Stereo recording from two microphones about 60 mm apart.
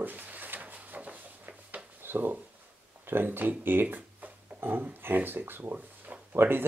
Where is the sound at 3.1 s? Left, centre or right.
Right.